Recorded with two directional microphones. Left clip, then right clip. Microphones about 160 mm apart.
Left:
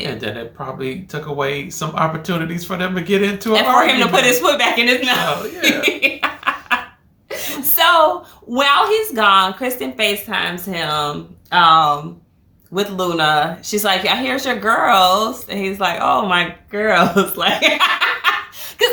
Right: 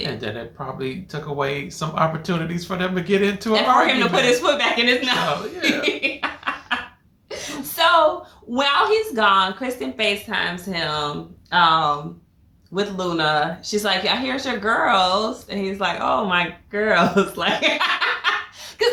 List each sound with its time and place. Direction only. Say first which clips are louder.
0.0 s speech: left 3 dB; 5° right (ahead or behind)
3.8 s a woman's voice: left 4 dB; 25° left (ahead or behind)
5.2 s speech: left 3 dB; centre (ahead or behind)
5.6 s snicker: left 6 dB; 25° left (ahead or behind)
7.3 s a sound: left 5 dB; 30° left (ahead or behind)
8.5 s a woman's voice: left 4 dB; 25° left (ahead or behind)